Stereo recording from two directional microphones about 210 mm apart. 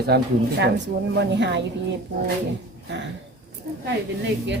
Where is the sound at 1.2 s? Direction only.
55° right (ahead or behind).